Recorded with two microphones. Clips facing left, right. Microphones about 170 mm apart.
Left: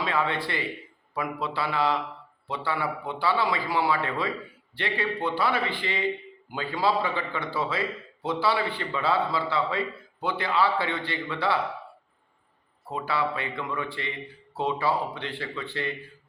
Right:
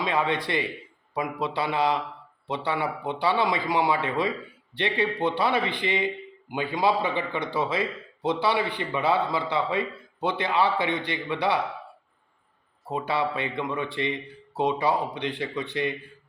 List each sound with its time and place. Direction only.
0.0 s a man's voice: 20° right (ahead or behind)
12.9 s a man's voice: 20° right (ahead or behind)